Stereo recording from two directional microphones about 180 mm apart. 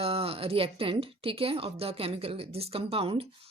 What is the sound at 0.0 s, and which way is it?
A woman's voice, 30° right (ahead or behind).